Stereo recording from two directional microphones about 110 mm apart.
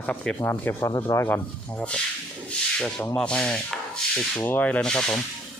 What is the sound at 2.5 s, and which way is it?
Rub, 10° left (ahead or behind).